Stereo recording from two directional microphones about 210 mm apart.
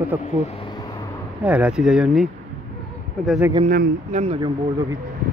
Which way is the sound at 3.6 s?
40° right (ahead or behind).